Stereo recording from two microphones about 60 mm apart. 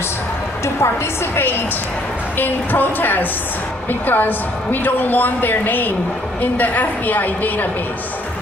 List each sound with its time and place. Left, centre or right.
1.3 s a woman's voice: left